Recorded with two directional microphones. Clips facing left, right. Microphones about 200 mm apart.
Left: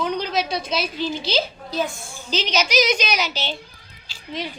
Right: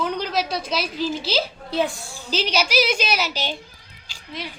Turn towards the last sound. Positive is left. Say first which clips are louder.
# left 1 dB
turn(degrees=-15)  # may be behind; listen again after turning